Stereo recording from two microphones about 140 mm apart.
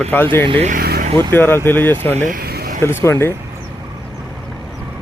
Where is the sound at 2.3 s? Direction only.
90° right.